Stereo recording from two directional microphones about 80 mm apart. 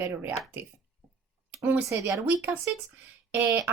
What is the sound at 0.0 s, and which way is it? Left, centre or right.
Speech, right.